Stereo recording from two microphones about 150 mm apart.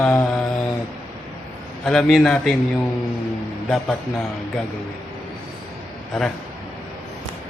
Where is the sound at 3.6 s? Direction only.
5° left (ahead or behind).